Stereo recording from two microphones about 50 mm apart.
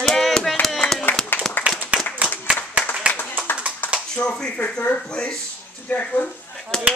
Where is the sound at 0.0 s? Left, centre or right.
Centre.